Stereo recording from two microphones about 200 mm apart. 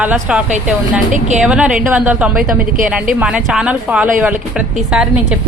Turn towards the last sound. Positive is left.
turn(degrees=-5)  # may be behind; listen again after turning